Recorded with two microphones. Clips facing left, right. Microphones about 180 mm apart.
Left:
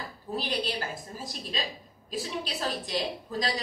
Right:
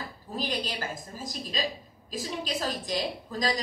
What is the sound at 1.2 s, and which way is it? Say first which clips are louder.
A woman's voice: right 4 dB; 40° right (ahead or behind).